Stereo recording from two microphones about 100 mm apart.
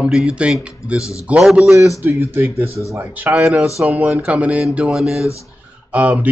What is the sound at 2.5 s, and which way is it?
Speech, 80° right.